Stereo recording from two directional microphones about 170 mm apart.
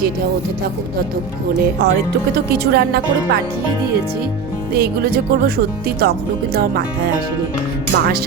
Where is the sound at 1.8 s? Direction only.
70° right (ahead or behind).